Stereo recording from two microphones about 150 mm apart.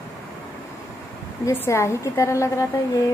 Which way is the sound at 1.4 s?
20° left (ahead or behind).